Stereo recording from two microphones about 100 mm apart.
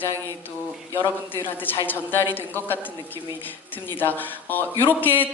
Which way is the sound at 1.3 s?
25° left (ahead or behind).